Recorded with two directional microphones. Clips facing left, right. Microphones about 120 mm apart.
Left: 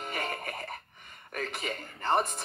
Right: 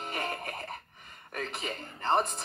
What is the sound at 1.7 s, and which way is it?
Speech, 30° right (ahead or behind).